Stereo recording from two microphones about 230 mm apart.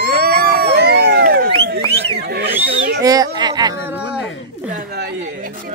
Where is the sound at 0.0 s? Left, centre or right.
Right.